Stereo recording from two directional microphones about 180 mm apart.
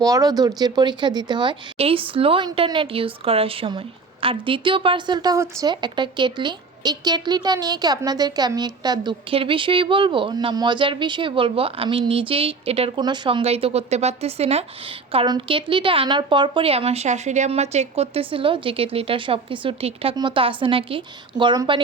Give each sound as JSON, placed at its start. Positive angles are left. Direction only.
{"t": 0.0, "sound": "a woman's voice", "side_deg": -20}